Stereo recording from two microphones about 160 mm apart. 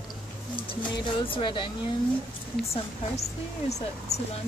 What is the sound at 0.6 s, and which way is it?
Speech, 35° left (ahead or behind).